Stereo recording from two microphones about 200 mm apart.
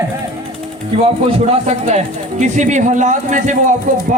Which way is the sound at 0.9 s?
25° right (ahead or behind).